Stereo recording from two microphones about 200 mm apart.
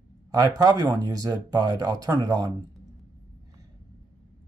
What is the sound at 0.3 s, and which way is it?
Speech, 20° right (ahead or behind).